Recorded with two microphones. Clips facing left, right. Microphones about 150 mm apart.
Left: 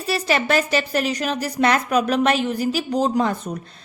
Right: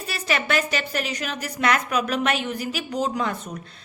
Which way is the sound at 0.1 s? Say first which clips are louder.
Left 5 dB; 30° left (ahead or behind).